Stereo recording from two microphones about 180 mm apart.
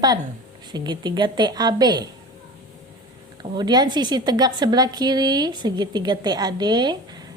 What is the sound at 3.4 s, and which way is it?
A woman's voice, 25° right (ahead or behind).